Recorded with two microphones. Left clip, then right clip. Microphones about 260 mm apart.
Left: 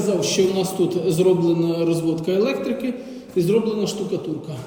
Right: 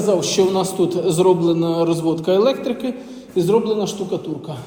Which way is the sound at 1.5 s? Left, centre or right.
Centre.